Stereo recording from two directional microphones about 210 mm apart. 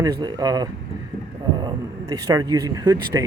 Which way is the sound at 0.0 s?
20° right (ahead or behind).